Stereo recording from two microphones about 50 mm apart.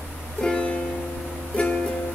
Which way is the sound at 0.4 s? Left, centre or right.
Left.